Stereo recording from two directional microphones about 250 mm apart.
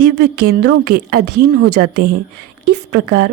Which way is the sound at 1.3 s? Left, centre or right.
Right.